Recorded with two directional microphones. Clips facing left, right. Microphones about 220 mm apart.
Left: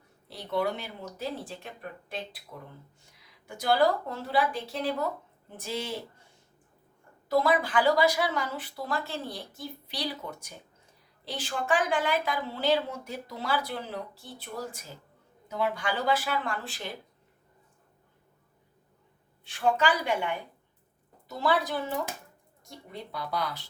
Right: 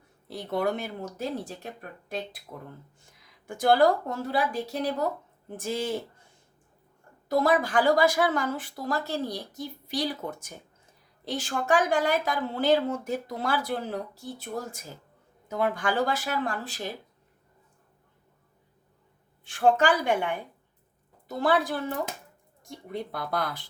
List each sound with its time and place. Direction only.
0.3 s speech: 50° right (ahead or behind)
3.4 s speech: 50° right (ahead or behind)
7.3 s speech: 45° right (ahead or behind)
19.5 s speech: 50° right (ahead or behind)
22.9 s speech: 50° right (ahead or behind)